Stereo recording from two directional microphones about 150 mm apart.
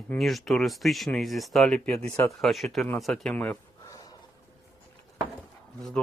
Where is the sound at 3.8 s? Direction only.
25° left (ahead or behind).